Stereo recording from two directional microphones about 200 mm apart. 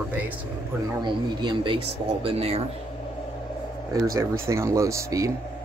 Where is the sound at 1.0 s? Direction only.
20° right (ahead or behind).